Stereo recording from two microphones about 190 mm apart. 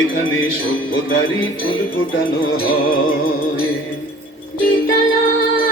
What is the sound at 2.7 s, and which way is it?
Music, 50° left (ahead or behind).